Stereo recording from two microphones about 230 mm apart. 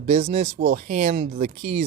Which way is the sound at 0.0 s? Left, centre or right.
Right.